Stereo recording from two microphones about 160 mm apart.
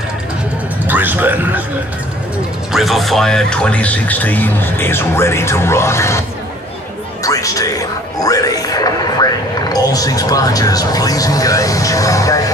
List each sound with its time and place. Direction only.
0.8 s a man's voice: 10° right (ahead or behind)
2.7 s speech: centre (ahead or behind); by 6.2 s 15° left (ahead or behind)
7.2 s speech: 20° left (ahead or behind)